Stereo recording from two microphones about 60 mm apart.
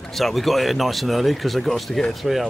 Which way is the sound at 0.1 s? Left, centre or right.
Centre.